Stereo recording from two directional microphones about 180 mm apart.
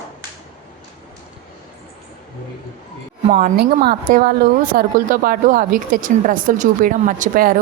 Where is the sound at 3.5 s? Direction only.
60° right (ahead or behind).